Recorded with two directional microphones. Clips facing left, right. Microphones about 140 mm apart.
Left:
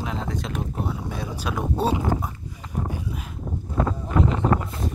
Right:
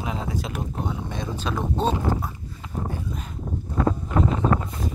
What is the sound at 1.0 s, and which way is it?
Speech, 5° left (ahead or behind).